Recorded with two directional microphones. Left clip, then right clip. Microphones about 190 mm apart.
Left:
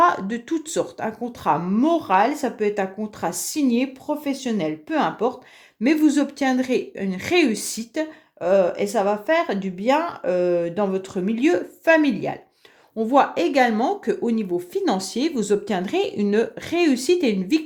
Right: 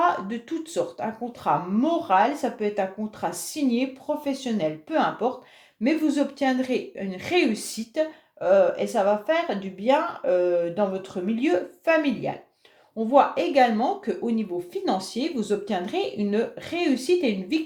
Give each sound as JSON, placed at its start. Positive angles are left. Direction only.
{"t": 0.0, "sound": "a woman's voice", "side_deg": 40}